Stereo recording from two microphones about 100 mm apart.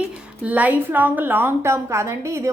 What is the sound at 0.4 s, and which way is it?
A woman's voice, 15° right (ahead or behind).